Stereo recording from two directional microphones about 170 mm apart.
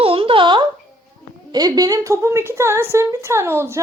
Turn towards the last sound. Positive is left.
turn(degrees=-15)  # may be behind; listen again after turning